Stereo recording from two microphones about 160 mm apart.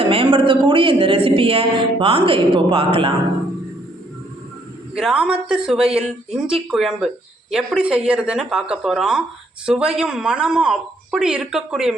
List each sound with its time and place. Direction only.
0.1 s speech: 35° right (ahead or behind)
4.9 s speech: 5° right (ahead or behind)